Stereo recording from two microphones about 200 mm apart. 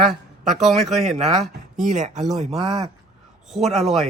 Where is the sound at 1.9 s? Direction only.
40° right (ahead or behind).